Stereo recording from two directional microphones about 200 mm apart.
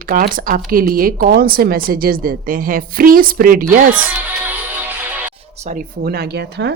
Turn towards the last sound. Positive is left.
turn(degrees=-55)  # may be behind; listen again after turning